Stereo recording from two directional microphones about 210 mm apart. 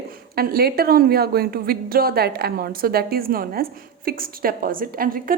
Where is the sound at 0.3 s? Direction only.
45° right (ahead or behind).